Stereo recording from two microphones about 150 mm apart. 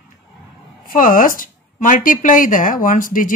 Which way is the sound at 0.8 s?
65° left (ahead or behind).